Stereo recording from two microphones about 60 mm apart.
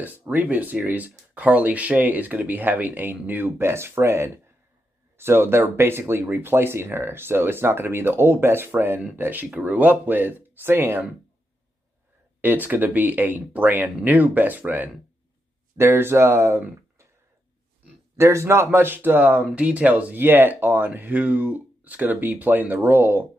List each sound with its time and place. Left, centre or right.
0.0 s speech: right
12.4 s speech: right
15.8 s speech: right
18.1 s speech: right